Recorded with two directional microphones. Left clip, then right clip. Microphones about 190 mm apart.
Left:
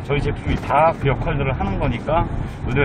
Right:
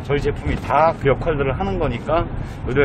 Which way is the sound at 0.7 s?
25° right (ahead or behind).